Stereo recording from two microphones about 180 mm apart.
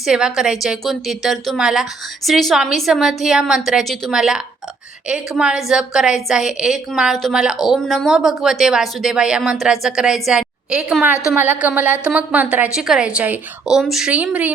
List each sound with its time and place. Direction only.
0.0 s a woman's voice: 5° right (ahead or behind)